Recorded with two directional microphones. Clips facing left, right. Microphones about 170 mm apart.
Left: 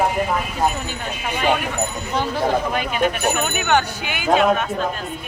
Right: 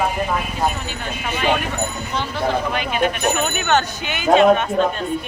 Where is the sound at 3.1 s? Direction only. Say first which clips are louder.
Right 1 dB; 10° left (ahead or behind).